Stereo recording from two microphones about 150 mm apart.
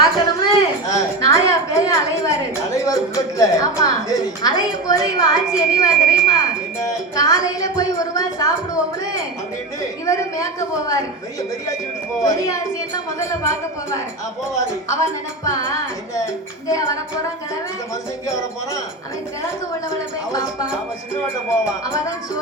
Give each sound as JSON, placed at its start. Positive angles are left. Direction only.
{"t": 0.0, "sound": "a woman's voice", "side_deg": 25}
{"t": 12.2, "sound": "speech", "side_deg": 20}
{"t": 15.4, "sound": "speech", "side_deg": 20}
{"t": 19.9, "sound": "speech", "side_deg": 25}